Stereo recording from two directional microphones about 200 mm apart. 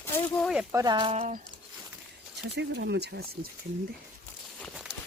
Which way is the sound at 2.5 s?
60° right (ahead or behind).